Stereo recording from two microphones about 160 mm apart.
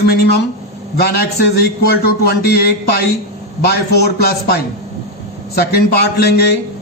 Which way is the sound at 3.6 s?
90° left.